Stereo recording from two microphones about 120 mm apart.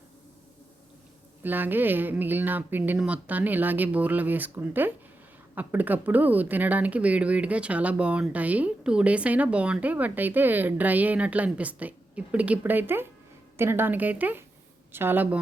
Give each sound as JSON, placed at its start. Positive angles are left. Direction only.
{"t": 1.4, "sound": "speech", "side_deg": -15}